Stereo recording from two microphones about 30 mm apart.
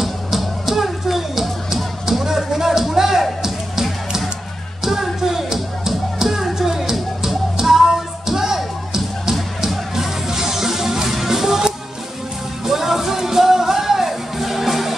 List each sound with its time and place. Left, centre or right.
0.0 s music: centre
4.8 s music: centre